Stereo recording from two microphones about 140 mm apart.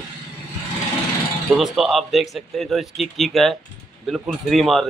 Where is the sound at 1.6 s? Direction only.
Centre (ahead or behind).